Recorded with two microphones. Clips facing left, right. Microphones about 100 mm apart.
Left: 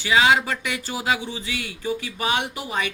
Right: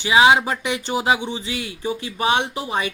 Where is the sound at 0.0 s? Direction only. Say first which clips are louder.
Right 4 dB; 15° right (ahead or behind).